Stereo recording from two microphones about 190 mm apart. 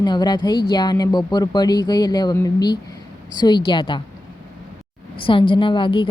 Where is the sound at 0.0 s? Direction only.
20° left (ahead or behind).